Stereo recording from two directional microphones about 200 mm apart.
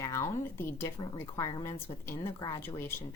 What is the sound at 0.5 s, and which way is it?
Speech, 10° left (ahead or behind).